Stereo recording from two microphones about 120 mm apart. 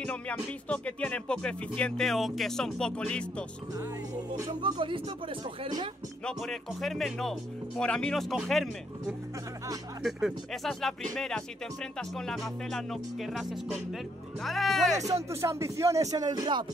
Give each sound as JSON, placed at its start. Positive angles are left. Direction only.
{"t": 0.0, "sound": "speech", "side_deg": 10}
{"t": 4.6, "sound": "speech", "side_deg": -45}
{"t": 6.2, "sound": "speech", "side_deg": 0}
{"t": 15.0, "sound": "speech", "side_deg": -25}